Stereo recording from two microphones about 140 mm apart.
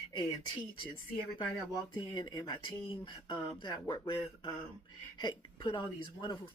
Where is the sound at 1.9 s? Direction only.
35° left (ahead or behind).